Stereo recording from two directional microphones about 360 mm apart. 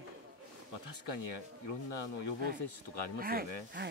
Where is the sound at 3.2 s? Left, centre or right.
Right.